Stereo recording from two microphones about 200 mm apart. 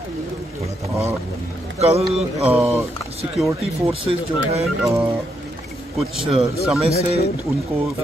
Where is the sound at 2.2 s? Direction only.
5° right (ahead or behind).